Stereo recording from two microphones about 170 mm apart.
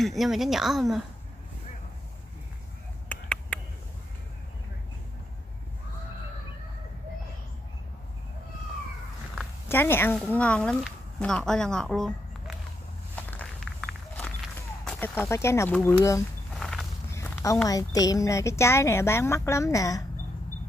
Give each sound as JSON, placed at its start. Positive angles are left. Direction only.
{"t": 0.0, "sound": "a woman's voice", "side_deg": 0}
{"t": 3.1, "sound": "a sound", "side_deg": 5}
{"t": 9.7, "sound": "a woman's voice", "side_deg": 15}
{"t": 13.1, "sound": "walk", "side_deg": 10}
{"t": 14.9, "sound": "a woman's voice", "side_deg": 10}
{"t": 16.5, "sound": "walk", "side_deg": 5}
{"t": 17.1, "sound": "a sound", "side_deg": 15}
{"t": 17.6, "sound": "a woman's voice", "side_deg": 20}